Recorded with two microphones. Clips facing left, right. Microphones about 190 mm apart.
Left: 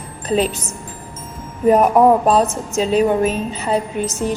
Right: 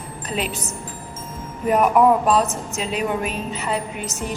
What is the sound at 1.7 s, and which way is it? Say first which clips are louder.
A woman's voice: left 4 dB; 35° left (ahead or behind).